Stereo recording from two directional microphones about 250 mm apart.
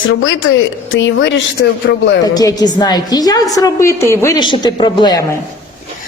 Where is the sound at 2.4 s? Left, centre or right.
Centre.